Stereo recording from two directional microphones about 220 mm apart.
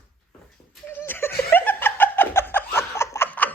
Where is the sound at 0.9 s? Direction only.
10° left (ahead or behind).